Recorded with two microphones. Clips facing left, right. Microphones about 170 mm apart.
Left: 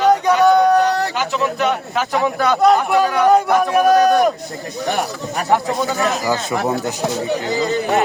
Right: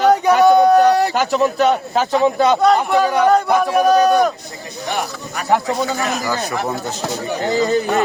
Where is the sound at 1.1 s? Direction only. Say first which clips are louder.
Right 4 dB; 40° right (ahead or behind); by 2.6 s 25° right (ahead or behind).